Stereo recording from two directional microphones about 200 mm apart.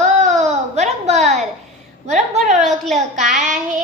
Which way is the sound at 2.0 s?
35° right (ahead or behind).